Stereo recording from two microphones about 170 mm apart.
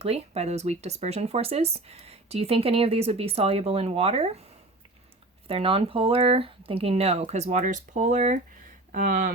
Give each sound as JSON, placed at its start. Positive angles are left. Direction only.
{"t": 0.0, "sound": "speech", "side_deg": -40}
{"t": 5.5, "sound": "speech", "side_deg": -35}